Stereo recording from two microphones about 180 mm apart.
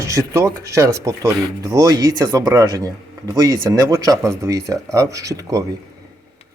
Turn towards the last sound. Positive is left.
turn(degrees=-20)  # may be behind; listen again after turning